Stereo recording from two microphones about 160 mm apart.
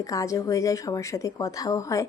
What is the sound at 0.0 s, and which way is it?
Speech, 20° left (ahead or behind).